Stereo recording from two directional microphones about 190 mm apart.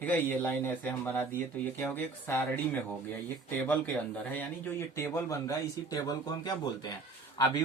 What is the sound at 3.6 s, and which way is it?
A man's voice, 10° left (ahead or behind).